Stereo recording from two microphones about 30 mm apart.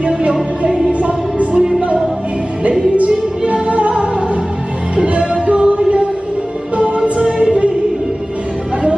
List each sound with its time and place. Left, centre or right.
0.3 s music: right
0.9 s music: right
3.0 s music: right
7.2 s music: right